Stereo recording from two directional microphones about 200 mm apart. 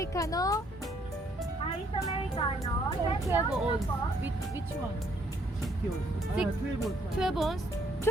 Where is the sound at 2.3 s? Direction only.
25° left (ahead or behind).